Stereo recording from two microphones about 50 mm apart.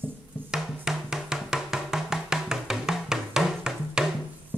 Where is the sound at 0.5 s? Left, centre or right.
Centre.